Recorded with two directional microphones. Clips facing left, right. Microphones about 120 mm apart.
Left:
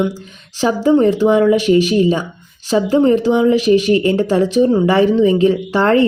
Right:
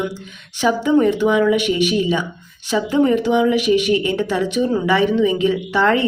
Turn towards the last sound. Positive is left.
turn(degrees=40)  # may be behind; listen again after turning